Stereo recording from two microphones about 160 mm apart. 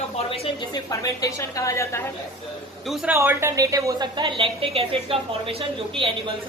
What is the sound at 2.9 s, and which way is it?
A woman's voice, 10° right (ahead or behind).